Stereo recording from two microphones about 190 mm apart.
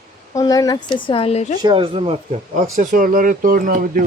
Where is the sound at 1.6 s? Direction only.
25° right (ahead or behind).